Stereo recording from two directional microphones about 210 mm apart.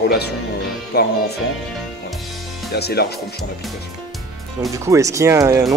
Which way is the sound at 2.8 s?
50° left (ahead or behind).